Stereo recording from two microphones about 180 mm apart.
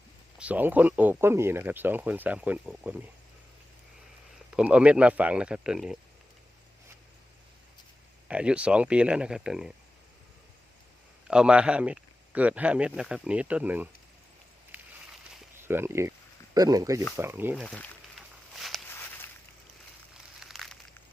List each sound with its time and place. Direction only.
0.3 s speech: 10° right (ahead or behind)
4.5 s a man's voice: 5° right (ahead or behind)
8.3 s speech: 5° right (ahead or behind)
11.3 s speech: 5° right (ahead or behind)
14.7 s a sound: 10° right (ahead or behind)
15.6 s speech: 15° right (ahead or behind)
18.5 s walk: centre (ahead or behind)
18.9 s walk: 15° left (ahead or behind)
20.4 s a sound: centre (ahead or behind)